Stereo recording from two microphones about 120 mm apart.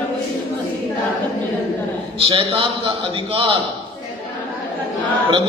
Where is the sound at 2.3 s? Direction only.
55° right (ahead or behind).